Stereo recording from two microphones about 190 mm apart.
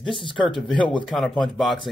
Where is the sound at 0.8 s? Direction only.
25° left (ahead or behind).